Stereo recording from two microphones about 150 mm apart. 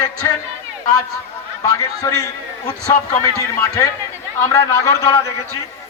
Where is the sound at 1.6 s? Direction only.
20° left (ahead or behind).